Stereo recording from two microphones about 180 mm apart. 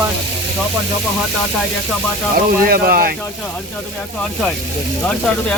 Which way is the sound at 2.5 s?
55° right (ahead or behind).